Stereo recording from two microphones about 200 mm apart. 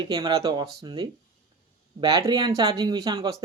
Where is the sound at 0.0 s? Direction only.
20° right (ahead or behind).